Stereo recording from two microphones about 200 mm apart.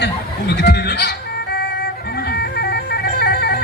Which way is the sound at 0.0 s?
60° left (ahead or behind).